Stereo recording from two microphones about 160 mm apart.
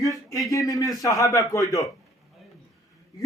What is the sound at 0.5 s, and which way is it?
Speech, 20° left (ahead or behind).